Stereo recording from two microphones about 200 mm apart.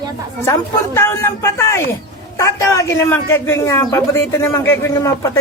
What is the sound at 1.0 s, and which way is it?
A man's voice, 10° left (ahead or behind).